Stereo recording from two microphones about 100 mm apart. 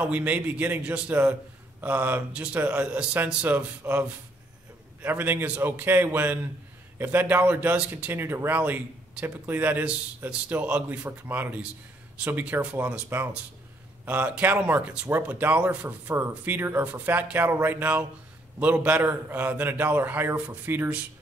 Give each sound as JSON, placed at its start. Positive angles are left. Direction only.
{"t": 0.0, "sound": "a man's voice", "side_deg": -15}